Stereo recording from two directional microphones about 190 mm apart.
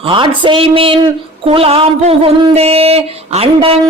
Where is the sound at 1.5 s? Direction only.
30° right (ahead or behind).